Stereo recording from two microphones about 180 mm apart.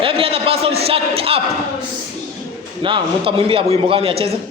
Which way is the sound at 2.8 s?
30° right (ahead or behind).